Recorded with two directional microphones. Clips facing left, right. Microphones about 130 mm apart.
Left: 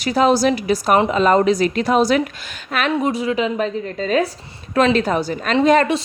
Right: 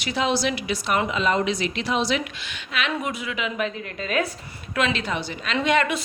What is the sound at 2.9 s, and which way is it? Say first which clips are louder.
A woman's voice: left 9 dB; 35° left (ahead or behind).